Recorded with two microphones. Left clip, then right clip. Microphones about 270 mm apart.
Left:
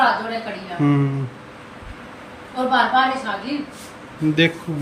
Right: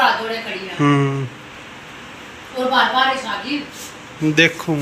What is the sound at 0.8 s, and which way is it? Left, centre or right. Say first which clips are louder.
Speech: right 4 dB; centre.